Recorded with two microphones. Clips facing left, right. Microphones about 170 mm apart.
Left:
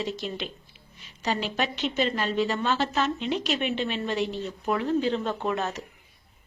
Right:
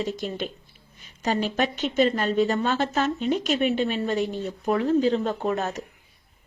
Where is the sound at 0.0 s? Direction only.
45° right (ahead or behind).